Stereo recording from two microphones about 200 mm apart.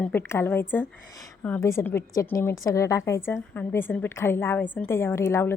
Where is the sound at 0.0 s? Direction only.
10° left (ahead or behind).